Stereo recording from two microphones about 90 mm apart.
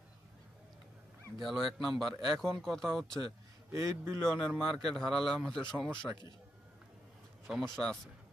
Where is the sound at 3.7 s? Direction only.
35° right (ahead or behind).